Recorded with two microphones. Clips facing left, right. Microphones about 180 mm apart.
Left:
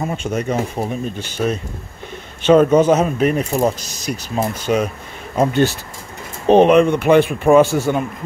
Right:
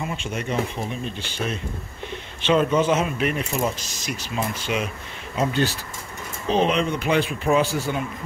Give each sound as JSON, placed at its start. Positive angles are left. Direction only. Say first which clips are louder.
{"t": 0.0, "sound": "speech", "louder": "left 7 dB", "side_deg": 40}